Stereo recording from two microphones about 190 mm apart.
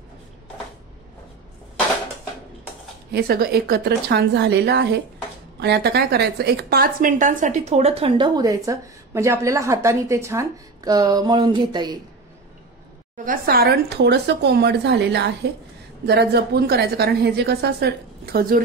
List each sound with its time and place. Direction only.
3.1 s a woman's voice: 55° right (ahead or behind); by 12.0 s 20° right (ahead or behind)
13.2 s a woman's voice: 50° right (ahead or behind)